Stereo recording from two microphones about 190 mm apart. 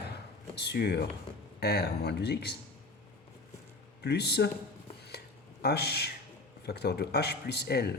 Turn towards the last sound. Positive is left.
turn(degrees=60)  # may be behind; listen again after turning